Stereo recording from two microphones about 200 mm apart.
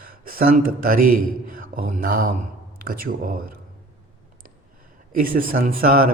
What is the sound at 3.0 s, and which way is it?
Speech, 45° right (ahead or behind).